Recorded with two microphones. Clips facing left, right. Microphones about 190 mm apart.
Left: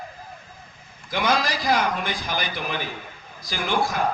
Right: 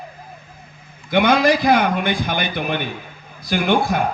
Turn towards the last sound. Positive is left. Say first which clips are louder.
# right 7 dB
turn(degrees=-60)  # may be behind; listen again after turning